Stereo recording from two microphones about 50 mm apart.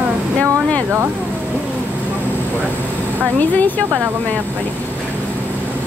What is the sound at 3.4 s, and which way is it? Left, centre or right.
Speech, left.